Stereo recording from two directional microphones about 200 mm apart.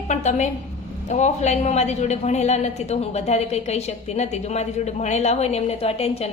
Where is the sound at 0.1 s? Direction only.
35° left (ahead or behind).